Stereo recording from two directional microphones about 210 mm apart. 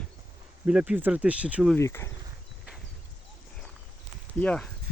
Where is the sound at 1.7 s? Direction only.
10° left (ahead or behind).